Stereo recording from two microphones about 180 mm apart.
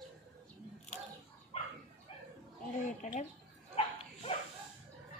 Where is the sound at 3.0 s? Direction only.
40° left (ahead or behind).